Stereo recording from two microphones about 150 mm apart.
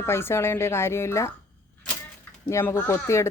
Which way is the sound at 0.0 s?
15° left (ahead or behind).